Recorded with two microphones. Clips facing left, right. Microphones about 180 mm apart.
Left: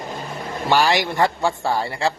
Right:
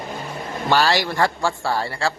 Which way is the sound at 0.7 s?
15° left (ahead or behind).